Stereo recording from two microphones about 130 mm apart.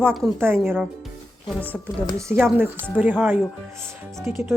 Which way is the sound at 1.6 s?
10° left (ahead or behind).